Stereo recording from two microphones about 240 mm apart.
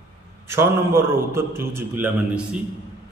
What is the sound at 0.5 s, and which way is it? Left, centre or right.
A man's voice, centre.